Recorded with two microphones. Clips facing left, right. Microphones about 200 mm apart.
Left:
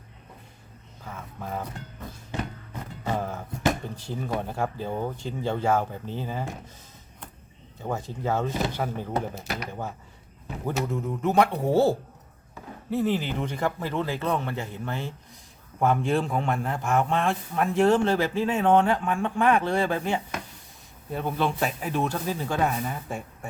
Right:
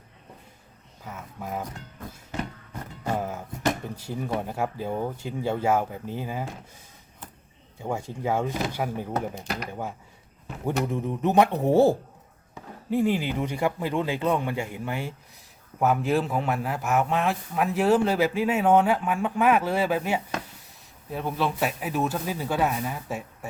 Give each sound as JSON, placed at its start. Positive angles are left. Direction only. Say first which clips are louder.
{"t": 1.0, "sound": "a sound", "louder": "right 1 dB", "side_deg": -10}
{"t": 3.0, "sound": "music", "louder": "right 1 dB", "side_deg": -10}
{"t": 3.9, "sound": "a man's voice", "louder": "right 1 dB", "side_deg": -10}
{"t": 7.8, "sound": "a man's voice", "louder": "right 1 dB", "side_deg": -10}
{"t": 9.3, "sound": "speech", "louder": "right 1 dB", "side_deg": 5}
{"t": 10.8, "sound": "a man's voice", "louder": "right 1 dB", "side_deg": -20}